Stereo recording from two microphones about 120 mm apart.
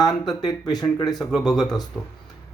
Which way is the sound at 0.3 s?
35° left (ahead or behind).